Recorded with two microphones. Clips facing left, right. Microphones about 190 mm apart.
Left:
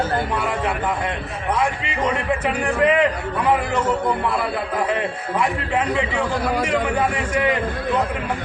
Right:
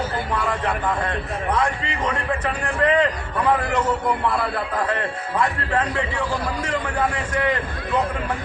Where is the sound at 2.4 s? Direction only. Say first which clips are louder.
Left 3 dB; 15° left (ahead or behind).